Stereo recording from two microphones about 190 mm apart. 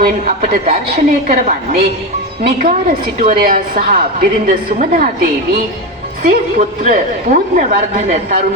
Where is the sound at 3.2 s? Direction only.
50° right (ahead or behind).